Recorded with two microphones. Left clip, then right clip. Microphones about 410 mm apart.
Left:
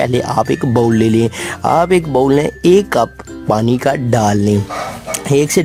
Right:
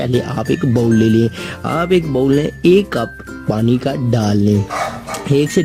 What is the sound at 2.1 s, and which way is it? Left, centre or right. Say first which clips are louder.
Speech: left 3 dB; left.